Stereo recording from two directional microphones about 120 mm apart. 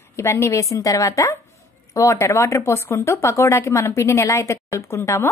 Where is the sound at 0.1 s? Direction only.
25° left (ahead or behind).